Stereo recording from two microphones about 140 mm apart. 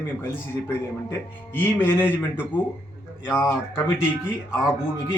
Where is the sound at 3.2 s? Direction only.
15° left (ahead or behind).